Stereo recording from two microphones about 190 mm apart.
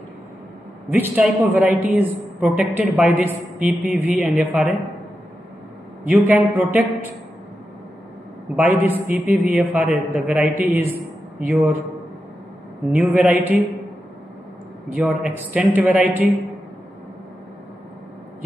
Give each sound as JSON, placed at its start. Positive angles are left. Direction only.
{"t": 0.9, "sound": "a woman's voice", "side_deg": -5}
{"t": 6.0, "sound": "a woman's voice", "side_deg": -10}
{"t": 8.5, "sound": "a woman's voice", "side_deg": -10}
{"t": 12.9, "sound": "a woman's voice", "side_deg": -5}
{"t": 14.9, "sound": "a woman's voice", "side_deg": -5}